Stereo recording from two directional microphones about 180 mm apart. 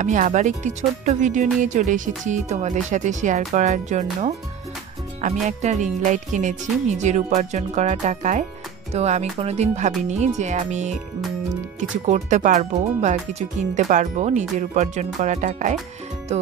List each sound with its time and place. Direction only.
0.0 s speech: 45° right (ahead or behind)
12.1 s speech: 45° right (ahead or behind)